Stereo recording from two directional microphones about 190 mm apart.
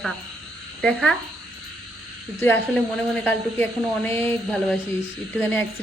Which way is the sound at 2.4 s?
10° left (ahead or behind).